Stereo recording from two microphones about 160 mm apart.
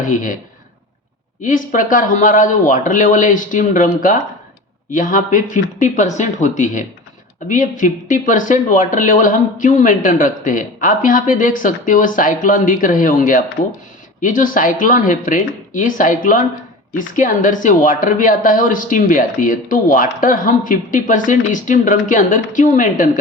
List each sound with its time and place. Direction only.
0.0 s speech: 55° left (ahead or behind)
1.4 s speech: 55° left (ahead or behind)